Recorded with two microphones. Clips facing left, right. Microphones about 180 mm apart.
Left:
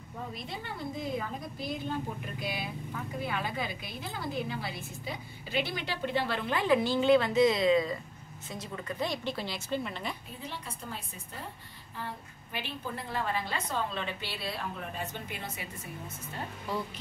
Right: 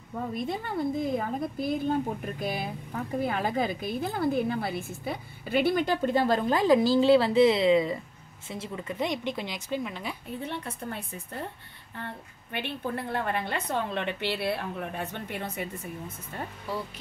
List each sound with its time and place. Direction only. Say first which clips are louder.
0.3 s a woman's voice: right 11 dB; 50° right (ahead or behind); by 10.1 s 10° right (ahead or behind)
10.4 s a woman's voice: right 7 dB; 60° right (ahead or behind)
12.5 s a woman's voice: right 6 dB; 60° right (ahead or behind)
16.7 s speech: right 1 dB; 10° right (ahead or behind)